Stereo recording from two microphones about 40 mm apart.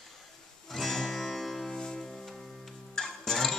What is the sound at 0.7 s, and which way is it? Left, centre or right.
Music, centre.